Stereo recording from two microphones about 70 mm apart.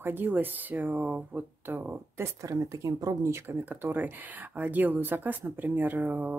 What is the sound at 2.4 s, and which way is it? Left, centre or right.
Speech, right.